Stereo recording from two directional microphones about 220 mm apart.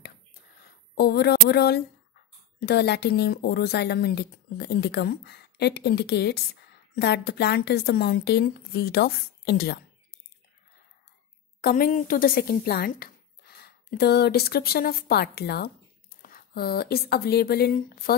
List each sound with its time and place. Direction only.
0.6 s speech: 45° left (ahead or behind)
11.6 s speech: 40° left (ahead or behind)